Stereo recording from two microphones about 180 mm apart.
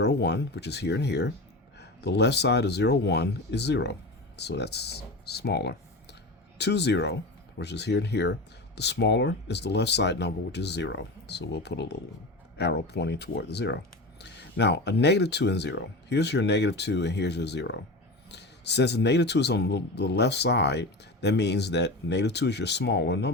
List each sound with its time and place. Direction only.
0.0 s a man's voice: 70° left (ahead or behind)